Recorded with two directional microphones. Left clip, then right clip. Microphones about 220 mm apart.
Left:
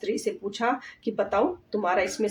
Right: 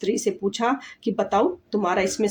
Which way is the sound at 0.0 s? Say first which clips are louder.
Right 5 dB; 50° right (ahead or behind).